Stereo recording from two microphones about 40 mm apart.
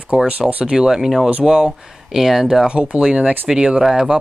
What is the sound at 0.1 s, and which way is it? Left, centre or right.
Speech, right.